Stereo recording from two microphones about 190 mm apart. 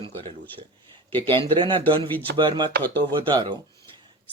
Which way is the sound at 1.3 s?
25° right (ahead or behind).